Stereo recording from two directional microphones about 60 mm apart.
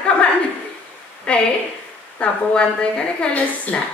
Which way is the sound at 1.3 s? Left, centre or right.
Left.